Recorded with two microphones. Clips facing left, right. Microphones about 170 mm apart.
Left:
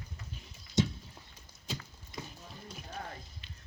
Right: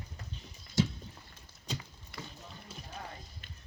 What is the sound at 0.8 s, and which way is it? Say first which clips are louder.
Horse: even; 20° left (ahead or behind).